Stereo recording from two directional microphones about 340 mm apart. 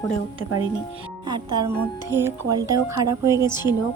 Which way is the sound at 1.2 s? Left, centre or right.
Centre.